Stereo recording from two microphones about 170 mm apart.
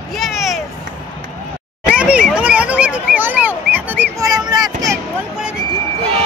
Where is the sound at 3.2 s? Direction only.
10° right (ahead or behind).